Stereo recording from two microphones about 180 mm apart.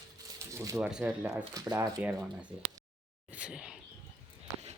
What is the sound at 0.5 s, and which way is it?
Speech, 15° right (ahead or behind).